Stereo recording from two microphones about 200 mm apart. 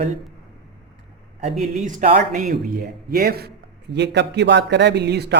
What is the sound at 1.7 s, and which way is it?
Speech, 40° right (ahead or behind).